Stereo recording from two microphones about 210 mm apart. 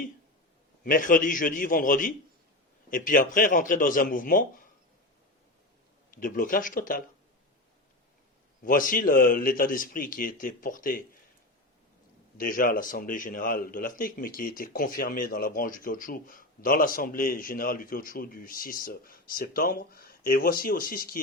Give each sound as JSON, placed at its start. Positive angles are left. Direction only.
{"t": 0.9, "sound": "a man's voice", "side_deg": 40}
{"t": 6.1, "sound": "a man's voice", "side_deg": 40}
{"t": 8.6, "sound": "a man's voice", "side_deg": 40}
{"t": 12.4, "sound": "a man's voice", "side_deg": 40}